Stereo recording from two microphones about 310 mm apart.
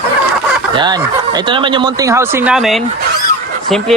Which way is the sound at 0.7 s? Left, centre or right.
Centre.